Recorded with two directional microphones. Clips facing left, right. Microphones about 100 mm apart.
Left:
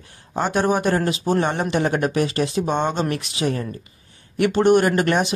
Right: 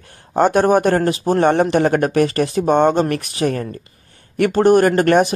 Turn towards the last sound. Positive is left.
turn(degrees=-50)  # may be behind; listen again after turning